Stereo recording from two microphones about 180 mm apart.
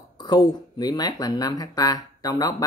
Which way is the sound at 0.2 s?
25° left (ahead or behind).